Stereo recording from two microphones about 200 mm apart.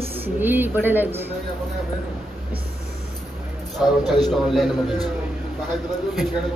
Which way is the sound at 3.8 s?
Centre (ahead or behind).